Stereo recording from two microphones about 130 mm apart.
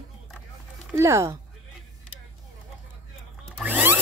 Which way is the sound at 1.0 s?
20° right (ahead or behind).